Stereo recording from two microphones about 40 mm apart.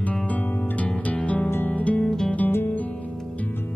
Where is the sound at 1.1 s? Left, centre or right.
Left.